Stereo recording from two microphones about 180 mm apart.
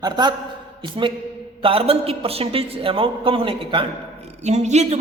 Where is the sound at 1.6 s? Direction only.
30° right (ahead or behind).